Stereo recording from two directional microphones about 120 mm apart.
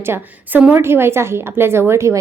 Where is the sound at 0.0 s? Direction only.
20° right (ahead or behind).